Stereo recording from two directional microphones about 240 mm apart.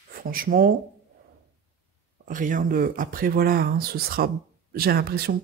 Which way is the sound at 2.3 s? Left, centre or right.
Right.